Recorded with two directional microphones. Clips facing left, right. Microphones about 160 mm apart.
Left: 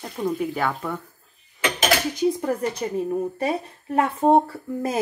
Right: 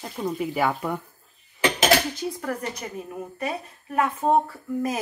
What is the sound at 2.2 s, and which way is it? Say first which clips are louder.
Speech: left 7 dB; 20° left (ahead or behind).